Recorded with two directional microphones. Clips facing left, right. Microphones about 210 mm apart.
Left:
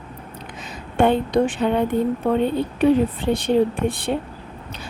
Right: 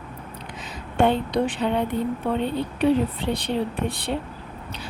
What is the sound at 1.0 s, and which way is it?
A woman's voice, 50° left (ahead or behind).